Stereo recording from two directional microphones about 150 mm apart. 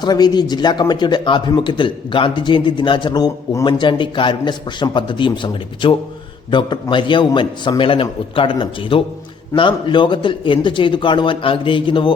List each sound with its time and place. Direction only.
0.0 s speech: 25° left (ahead or behind)